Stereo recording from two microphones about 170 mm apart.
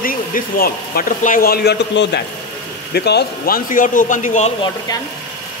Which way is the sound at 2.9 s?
70° left (ahead or behind).